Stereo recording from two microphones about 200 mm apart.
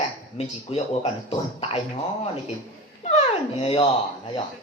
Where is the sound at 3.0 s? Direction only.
30° left (ahead or behind).